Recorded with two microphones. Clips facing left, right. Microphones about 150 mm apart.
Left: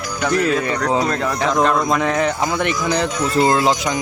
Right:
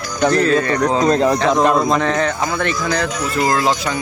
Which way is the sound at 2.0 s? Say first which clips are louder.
Even; 10° left (ahead or behind).